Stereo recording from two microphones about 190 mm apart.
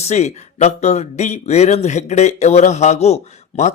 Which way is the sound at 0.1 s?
35° left (ahead or behind).